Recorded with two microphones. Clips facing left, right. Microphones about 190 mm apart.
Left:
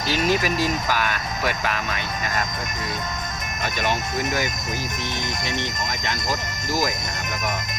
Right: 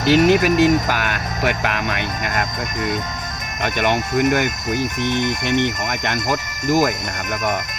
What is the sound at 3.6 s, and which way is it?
Speech, 65° right (ahead or behind).